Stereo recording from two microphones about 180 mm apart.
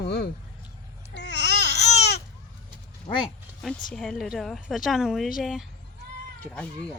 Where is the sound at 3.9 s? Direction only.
Centre (ahead or behind).